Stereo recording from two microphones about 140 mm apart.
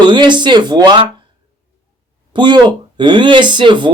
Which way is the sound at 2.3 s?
35° right (ahead or behind).